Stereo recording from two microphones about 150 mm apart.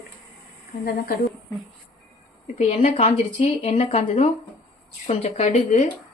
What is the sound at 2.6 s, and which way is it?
Speech, 45° left (ahead or behind).